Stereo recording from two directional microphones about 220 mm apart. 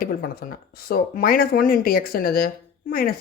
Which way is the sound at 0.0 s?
40° left (ahead or behind).